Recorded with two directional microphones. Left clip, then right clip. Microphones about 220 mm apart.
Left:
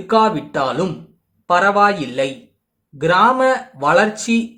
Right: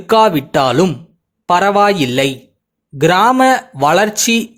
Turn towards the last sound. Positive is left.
turn(degrees=-40)  # may be behind; listen again after turning